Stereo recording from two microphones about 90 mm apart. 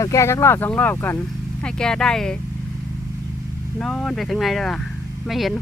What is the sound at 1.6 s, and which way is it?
Speech, 10° left (ahead or behind).